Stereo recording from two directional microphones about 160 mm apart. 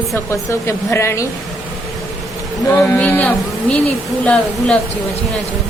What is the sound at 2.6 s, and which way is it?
Speech, 15° left (ahead or behind).